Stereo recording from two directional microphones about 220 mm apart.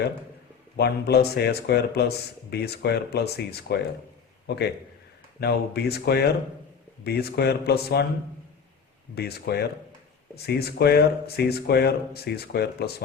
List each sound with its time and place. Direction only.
0.8 s a man's voice: 45° left (ahead or behind)
9.1 s speech: 45° left (ahead or behind)